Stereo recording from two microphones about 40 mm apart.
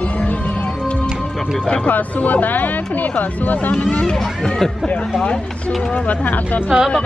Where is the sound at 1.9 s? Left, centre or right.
Left.